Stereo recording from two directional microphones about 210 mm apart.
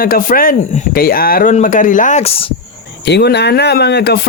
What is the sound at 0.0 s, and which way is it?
Speech, 45° left (ahead or behind).